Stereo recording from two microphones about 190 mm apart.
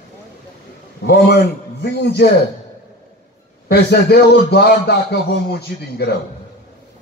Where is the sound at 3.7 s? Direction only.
60° left (ahead or behind).